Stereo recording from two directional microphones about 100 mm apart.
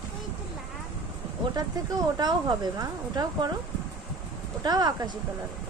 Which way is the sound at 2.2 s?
45° right (ahead or behind).